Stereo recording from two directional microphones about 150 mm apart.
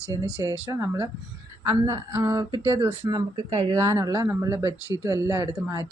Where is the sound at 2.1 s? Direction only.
20° right (ahead or behind).